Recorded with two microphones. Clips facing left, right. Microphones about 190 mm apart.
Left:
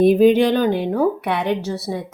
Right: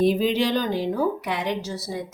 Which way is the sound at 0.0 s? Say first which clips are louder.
Left 8 dB; 55° left (ahead or behind).